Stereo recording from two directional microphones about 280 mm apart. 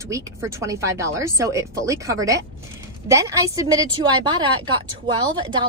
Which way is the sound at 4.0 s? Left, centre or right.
Right.